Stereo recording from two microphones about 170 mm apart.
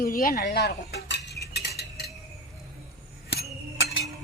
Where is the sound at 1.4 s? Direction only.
75° left (ahead or behind).